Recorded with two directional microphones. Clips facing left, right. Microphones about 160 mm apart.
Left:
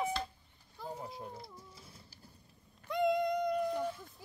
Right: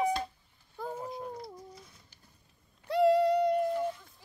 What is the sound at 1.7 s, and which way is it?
Bird, 30° left (ahead or behind).